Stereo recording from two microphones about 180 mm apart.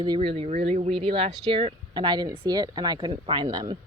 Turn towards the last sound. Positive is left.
turn(degrees=-25)  # may be behind; listen again after turning